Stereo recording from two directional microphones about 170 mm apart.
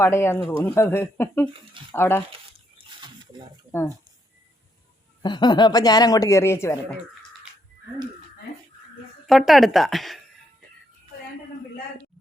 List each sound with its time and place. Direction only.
0.0 s speech: 15° left (ahead or behind)
2.7 s pig: 25° right (ahead or behind)
5.2 s speech: 25° left (ahead or behind)
9.5 s a woman's voice: centre (ahead or behind)